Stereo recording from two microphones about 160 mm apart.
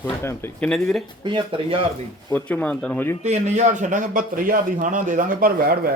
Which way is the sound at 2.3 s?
10° left (ahead or behind).